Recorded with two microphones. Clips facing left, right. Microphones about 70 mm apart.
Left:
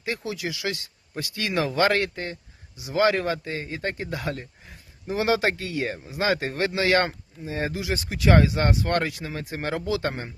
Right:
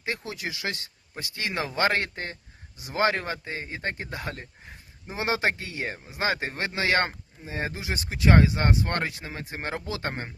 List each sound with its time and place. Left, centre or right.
0.3 s a man's voice: right